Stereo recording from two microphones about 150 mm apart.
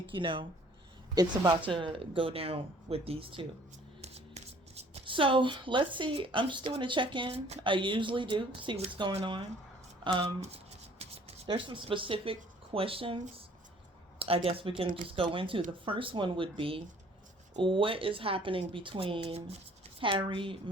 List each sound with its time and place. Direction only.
0.1 s speech: 35° right (ahead or behind)
4.0 s a sound: 45° right (ahead or behind)
6.7 s speech: 35° right (ahead or behind)
10.0 s shuffling cards: 35° right (ahead or behind)
11.4 s speech: 35° right (ahead or behind)
14.2 s speech: 40° right (ahead or behind)